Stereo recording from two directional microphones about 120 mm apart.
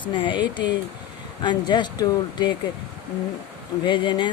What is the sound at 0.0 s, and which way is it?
Speech, 45° left (ahead or behind).